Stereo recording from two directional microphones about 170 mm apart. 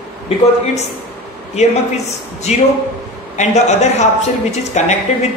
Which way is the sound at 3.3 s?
40° left (ahead or behind).